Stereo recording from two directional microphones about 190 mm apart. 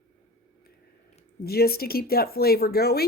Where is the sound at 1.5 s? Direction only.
55° left (ahead or behind).